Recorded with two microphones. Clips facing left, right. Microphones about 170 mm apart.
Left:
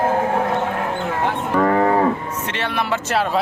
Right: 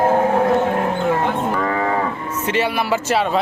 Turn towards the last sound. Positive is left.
turn(degrees=0)  # may be behind; listen again after turning